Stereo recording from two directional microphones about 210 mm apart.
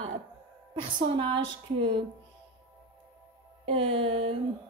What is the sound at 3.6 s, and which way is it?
Music, 25° right (ahead or behind).